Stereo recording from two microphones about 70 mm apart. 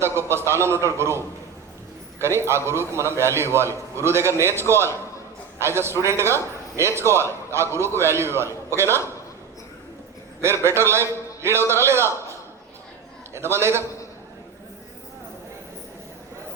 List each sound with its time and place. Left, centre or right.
0.0 s a man's voice: right
10.4 s a man's voice: right
13.3 s a man's voice: right